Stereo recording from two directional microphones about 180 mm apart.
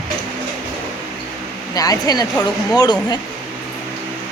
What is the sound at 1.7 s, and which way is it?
Speech, 20° left (ahead or behind).